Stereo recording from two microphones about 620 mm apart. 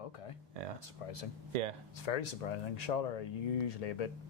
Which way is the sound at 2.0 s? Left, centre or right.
Left.